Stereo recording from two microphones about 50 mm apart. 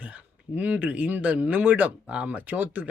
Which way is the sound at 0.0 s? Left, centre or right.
Right.